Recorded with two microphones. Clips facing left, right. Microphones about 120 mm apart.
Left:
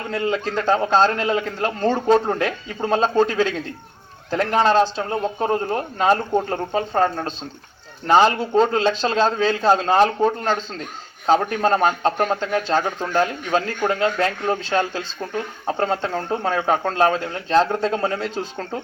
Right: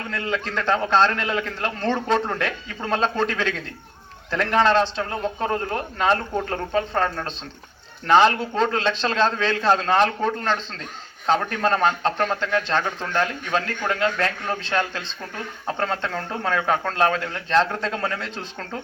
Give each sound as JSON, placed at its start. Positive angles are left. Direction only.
{"t": 0.1, "sound": "a man's voice", "side_deg": 35}
{"t": 5.0, "sound": "a man's voice", "side_deg": 25}